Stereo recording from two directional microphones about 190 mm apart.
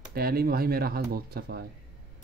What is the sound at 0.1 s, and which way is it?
Speech, 55° right (ahead or behind).